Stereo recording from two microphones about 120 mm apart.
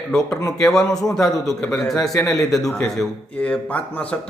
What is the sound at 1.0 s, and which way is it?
A man's voice, 30° left (ahead or behind).